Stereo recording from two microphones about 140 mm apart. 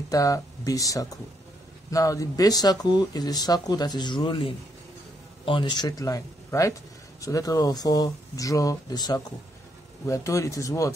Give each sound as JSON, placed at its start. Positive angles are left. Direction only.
{"t": 0.1, "sound": "speech", "side_deg": 25}